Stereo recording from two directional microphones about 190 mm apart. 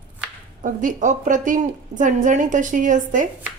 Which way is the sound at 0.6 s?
45° right (ahead or behind).